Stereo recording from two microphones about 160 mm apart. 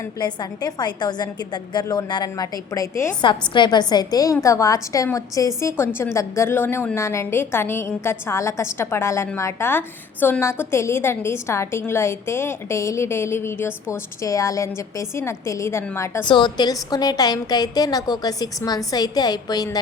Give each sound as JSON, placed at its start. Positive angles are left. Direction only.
{"t": 0.2, "sound": "a woman's voice", "side_deg": 25}
{"t": 3.2, "sound": "a woman's voice", "side_deg": 30}
{"t": 16.2, "sound": "a woman's voice", "side_deg": 30}